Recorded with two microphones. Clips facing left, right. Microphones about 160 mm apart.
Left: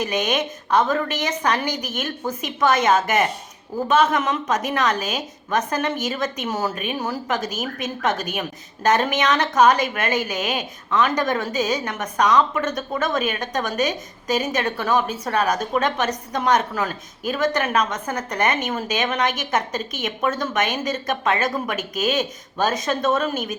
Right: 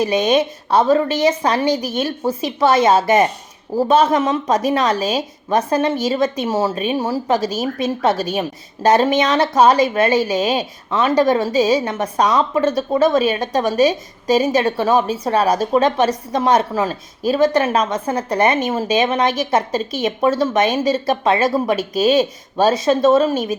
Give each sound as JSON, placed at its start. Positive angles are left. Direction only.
{"t": 0.0, "sound": "a woman's voice", "side_deg": -30}